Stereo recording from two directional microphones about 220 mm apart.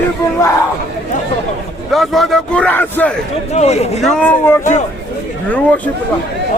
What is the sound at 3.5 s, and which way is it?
Speech, 30° left (ahead or behind).